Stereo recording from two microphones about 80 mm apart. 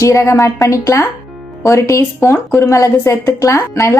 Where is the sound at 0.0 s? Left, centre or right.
Left.